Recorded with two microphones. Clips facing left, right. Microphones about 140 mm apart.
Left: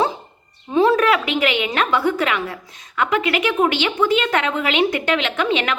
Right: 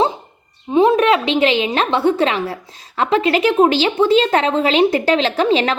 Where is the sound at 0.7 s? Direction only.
20° right (ahead or behind).